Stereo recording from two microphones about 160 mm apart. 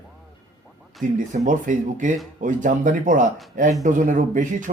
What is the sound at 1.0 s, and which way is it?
Speech, 55° right (ahead or behind).